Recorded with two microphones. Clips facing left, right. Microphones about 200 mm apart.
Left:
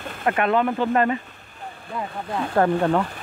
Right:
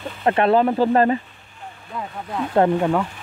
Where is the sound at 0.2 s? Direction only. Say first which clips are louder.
Right 4 dB; 30° right (ahead or behind).